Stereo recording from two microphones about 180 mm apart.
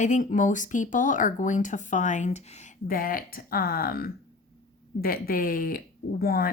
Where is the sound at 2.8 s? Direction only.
50° left (ahead or behind).